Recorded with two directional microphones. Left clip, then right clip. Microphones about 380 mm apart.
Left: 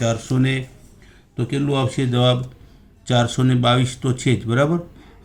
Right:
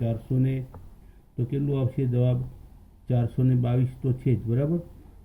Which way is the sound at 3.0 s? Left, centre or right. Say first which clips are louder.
Left 12 dB; left.